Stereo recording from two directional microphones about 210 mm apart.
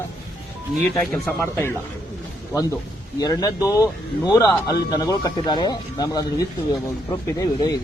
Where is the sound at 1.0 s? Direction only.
5° left (ahead or behind).